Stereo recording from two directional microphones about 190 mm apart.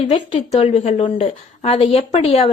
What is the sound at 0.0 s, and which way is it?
A woman's voice, 35° left (ahead or behind).